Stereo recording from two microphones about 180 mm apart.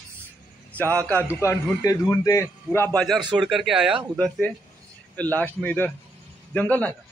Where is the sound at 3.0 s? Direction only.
Centre (ahead or behind).